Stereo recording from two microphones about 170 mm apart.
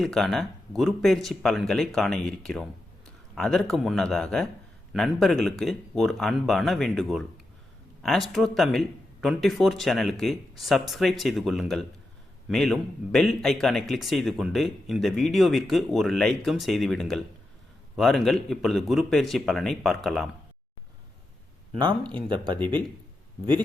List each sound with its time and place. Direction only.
0.0 s speech: centre (ahead or behind)
21.8 s speech: 25° right (ahead or behind)